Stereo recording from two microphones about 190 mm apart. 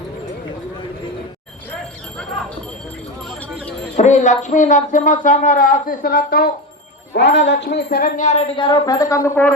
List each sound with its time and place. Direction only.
3.9 s speech: 35° left (ahead or behind)
7.2 s wind chime: 65° left (ahead or behind); by 8.4 s 40° left (ahead or behind)
8.5 s speech: 25° left (ahead or behind)